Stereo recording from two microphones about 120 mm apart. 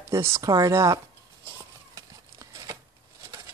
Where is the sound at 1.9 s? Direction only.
30° right (ahead or behind).